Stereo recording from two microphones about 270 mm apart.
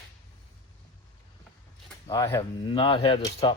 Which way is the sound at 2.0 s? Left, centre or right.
Centre.